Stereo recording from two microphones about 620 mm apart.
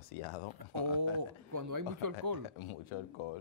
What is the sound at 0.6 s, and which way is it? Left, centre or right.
Speech, right.